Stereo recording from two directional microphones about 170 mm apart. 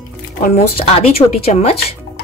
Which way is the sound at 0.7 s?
35° left (ahead or behind).